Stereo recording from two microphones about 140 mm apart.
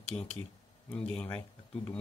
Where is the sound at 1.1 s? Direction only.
5° left (ahead or behind).